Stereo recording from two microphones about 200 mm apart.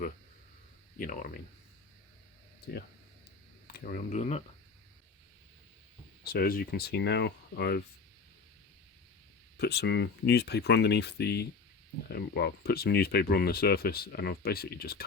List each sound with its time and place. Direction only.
0.9 s speech: 45° left (ahead or behind)
3.7 s speech: 45° left (ahead or behind)
6.2 s speech: 50° left (ahead or behind)
9.6 s speech: 55° left (ahead or behind)